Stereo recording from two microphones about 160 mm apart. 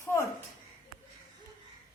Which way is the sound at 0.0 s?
20° left (ahead or behind).